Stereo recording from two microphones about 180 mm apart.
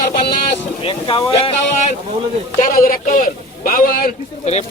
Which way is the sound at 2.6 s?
50° left (ahead or behind).